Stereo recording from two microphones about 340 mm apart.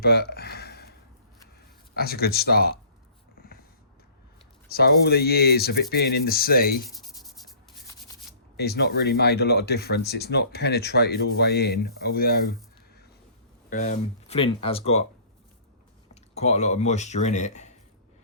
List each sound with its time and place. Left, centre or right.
0.0 s speech: left
2.0 s speech: left
4.7 s speech: left
6.8 s writing: centre
8.5 s speech: left
13.7 s speech: left
16.3 s speech: centre